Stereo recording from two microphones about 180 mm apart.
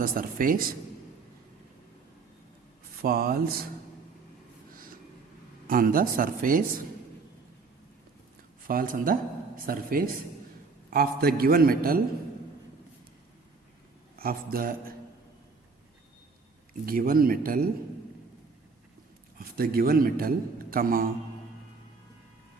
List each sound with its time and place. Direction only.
0.0 s speech: 50° right (ahead or behind)
3.0 s a man's voice: 55° right (ahead or behind)
5.6 s speech: 50° right (ahead or behind)
8.6 s a man's voice: 50° right (ahead or behind)
14.2 s speech: 55° right (ahead or behind)
16.8 s speech: 55° right (ahead or behind)
19.4 s a man's voice: 55° right (ahead or behind)